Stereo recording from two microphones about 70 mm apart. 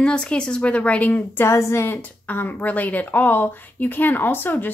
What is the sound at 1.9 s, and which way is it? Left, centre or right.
A woman's voice, left.